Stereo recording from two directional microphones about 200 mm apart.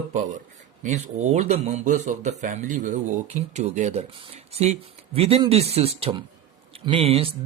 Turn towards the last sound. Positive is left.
turn(degrees=-30)  # may be behind; listen again after turning